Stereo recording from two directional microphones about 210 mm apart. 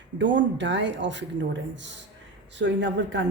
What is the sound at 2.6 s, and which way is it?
Speech, 55° right (ahead or behind).